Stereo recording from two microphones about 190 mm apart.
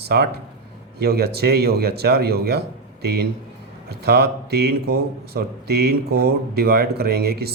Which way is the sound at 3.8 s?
55° right (ahead or behind).